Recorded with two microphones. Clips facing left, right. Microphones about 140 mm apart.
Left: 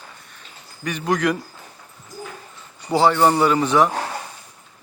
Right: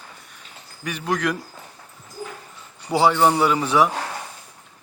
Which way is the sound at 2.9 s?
10° right (ahead or behind).